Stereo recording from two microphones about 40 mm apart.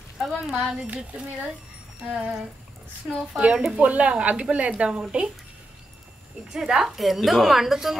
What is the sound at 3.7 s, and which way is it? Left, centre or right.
A woman's voice, right.